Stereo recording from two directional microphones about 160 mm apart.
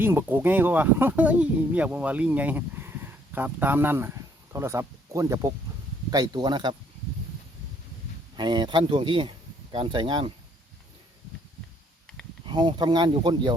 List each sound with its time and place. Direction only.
0.0 s speech: 15° right (ahead or behind)
8.4 s speech: 30° right (ahead or behind)
12.5 s speech: 30° right (ahead or behind)